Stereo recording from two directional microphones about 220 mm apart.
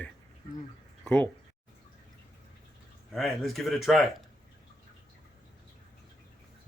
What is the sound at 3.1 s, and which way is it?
Speech, centre (ahead or behind).